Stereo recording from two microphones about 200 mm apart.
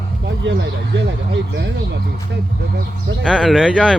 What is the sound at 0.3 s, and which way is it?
Speech, 65° right (ahead or behind).